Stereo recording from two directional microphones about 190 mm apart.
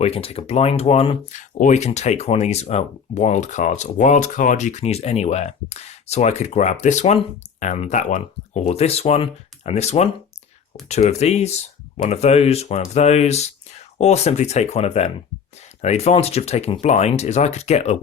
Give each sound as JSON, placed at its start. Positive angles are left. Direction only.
{"t": 0.0, "sound": "speech", "side_deg": 30}